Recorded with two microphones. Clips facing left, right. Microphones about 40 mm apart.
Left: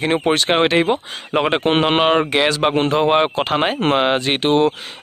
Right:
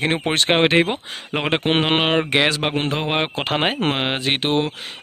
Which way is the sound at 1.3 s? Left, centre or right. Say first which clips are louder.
Left 4 dB; centre.